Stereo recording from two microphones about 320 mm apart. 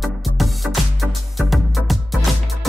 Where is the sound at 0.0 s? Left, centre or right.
Centre.